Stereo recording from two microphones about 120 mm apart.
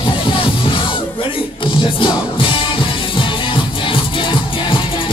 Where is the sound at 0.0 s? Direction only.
45° left (ahead or behind).